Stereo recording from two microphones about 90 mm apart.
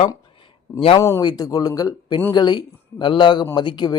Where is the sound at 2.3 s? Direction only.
55° left (ahead or behind).